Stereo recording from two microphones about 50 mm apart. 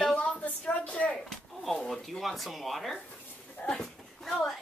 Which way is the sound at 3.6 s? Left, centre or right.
Left.